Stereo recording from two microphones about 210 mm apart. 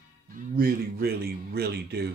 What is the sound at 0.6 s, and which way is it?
Speech, 45° right (ahead or behind).